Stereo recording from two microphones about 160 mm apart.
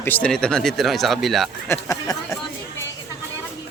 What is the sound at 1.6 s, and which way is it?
Speech, 20° left (ahead or behind).